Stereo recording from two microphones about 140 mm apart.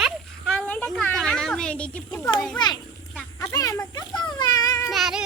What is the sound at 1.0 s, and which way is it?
Cat, 5° left (ahead or behind).